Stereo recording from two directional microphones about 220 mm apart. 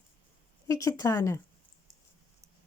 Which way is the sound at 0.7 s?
15° left (ahead or behind).